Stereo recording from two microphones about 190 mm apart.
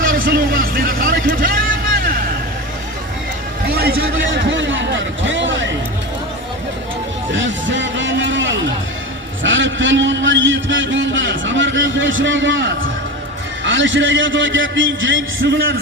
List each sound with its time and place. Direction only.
0.1 s speech: 50° right (ahead or behind)
3.8 s a man's voice: 55° right (ahead or behind)
4.2 s a sound: 75° right (ahead or behind)
7.3 s music: 75° right (ahead or behind)
9.4 s a man's voice: 85° right
13.7 s a man's voice: 85° right